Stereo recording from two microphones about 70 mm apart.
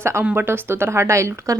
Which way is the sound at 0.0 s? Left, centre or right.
Right.